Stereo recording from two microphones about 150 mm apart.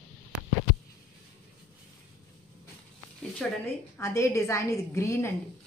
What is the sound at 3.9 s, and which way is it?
A woman's voice, 20° left (ahead or behind).